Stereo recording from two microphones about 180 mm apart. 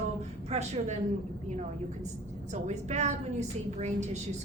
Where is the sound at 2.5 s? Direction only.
40° right (ahead or behind).